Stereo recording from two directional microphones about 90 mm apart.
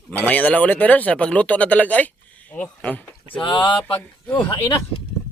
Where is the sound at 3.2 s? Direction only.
65° left (ahead or behind).